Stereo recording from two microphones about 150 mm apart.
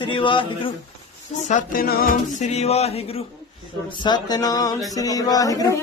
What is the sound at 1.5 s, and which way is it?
Music, 65° left (ahead or behind).